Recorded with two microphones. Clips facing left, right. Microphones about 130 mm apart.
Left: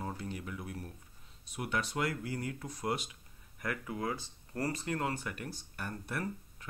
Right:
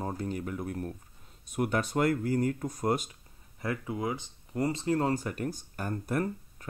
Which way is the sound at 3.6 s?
25° right (ahead or behind).